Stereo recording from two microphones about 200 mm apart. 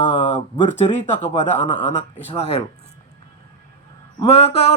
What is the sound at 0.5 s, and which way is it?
A man's voice, 25° left (ahead or behind).